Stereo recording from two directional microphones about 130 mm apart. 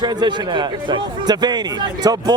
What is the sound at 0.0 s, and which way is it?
A man's voice, 35° right (ahead or behind).